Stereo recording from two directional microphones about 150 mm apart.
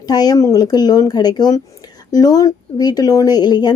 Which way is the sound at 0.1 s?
25° left (ahead or behind).